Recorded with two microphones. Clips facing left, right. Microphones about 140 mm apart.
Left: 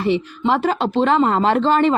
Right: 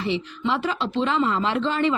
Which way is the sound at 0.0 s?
50° left (ahead or behind).